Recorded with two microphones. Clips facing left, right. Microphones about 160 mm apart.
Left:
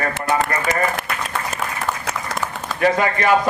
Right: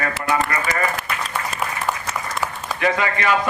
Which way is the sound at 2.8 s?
40° left (ahead or behind).